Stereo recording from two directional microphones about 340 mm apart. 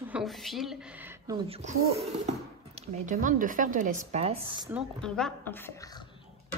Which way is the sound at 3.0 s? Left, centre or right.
Right.